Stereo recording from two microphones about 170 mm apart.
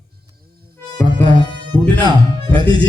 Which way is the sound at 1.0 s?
15° left (ahead or behind).